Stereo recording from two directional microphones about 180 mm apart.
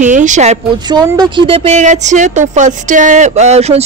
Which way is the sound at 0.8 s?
20° right (ahead or behind).